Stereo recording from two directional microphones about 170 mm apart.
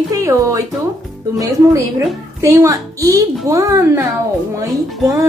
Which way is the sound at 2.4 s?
15° right (ahead or behind).